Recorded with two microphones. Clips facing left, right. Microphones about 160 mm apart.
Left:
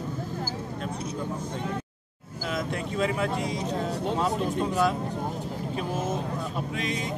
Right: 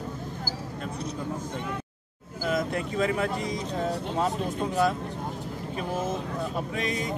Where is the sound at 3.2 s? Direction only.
Centre (ahead or behind).